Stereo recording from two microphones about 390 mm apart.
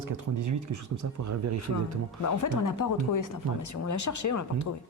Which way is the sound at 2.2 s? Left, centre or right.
Left.